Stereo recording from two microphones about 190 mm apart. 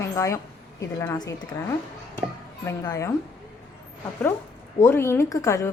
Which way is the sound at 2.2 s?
15° left (ahead or behind).